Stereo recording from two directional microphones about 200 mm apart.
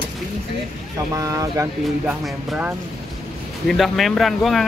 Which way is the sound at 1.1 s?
15° right (ahead or behind).